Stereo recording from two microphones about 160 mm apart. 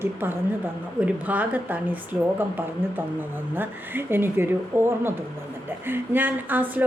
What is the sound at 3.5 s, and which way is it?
Speech, 10° right (ahead or behind).